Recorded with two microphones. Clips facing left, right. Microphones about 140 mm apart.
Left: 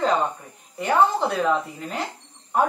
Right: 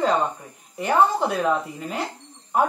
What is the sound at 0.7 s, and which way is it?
Speech, 5° right (ahead or behind).